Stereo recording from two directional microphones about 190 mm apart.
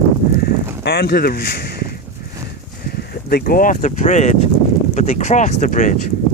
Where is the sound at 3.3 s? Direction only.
50° left (ahead or behind).